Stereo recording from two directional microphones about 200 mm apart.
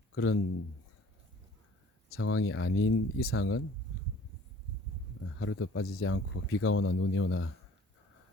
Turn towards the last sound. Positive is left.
turn(degrees=90)